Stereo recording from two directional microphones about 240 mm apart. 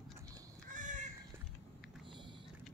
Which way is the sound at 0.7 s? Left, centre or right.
Right.